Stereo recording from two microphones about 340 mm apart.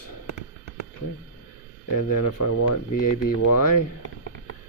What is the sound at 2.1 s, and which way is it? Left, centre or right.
Speech, left.